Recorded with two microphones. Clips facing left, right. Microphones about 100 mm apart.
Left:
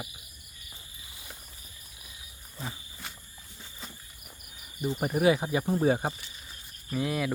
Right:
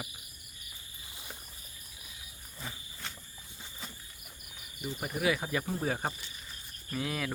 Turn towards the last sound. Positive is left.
turn(degrees=5)  # may be behind; listen again after turning